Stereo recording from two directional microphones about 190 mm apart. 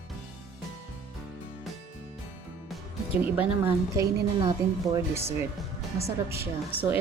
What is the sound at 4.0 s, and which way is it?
A woman's voice, 20° right (ahead or behind).